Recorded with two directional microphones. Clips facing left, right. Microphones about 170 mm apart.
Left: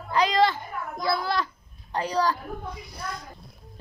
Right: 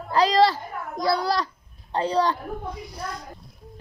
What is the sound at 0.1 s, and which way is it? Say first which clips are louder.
Babbling: right 3 dB; 35° right (ahead or behind).